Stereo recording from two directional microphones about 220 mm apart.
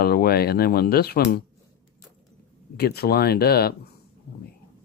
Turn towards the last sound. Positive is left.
turn(degrees=45)  # may be behind; listen again after turning